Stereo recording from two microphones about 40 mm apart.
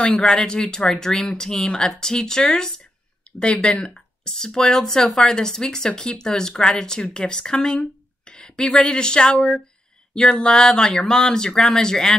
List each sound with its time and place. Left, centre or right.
0.2 s speech: centre
8.3 s a sound: left
8.7 s speech: centre